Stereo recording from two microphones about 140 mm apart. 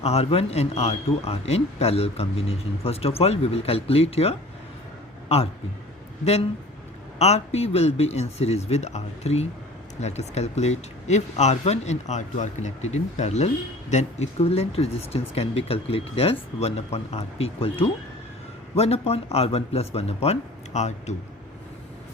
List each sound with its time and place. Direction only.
0.0 s speech: 45° left (ahead or behind)
7.2 s speech: 50° left (ahead or behind)